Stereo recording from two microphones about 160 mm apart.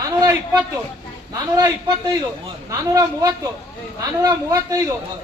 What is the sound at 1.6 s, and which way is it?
A man's voice, 25° right (ahead or behind).